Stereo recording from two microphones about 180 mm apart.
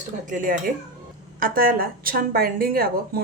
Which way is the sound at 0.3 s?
45° right (ahead or behind).